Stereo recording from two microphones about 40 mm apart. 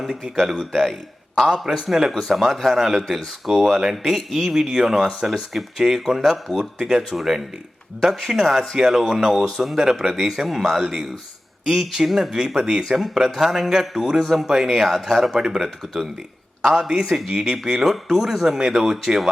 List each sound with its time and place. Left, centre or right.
1.6 s speech: centre
9.0 s speech: centre
9.8 s speech: centre
15.3 s speech: centre